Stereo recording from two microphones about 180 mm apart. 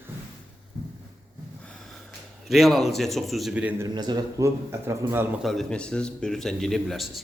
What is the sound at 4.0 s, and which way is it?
A man's voice, 20° right (ahead or behind).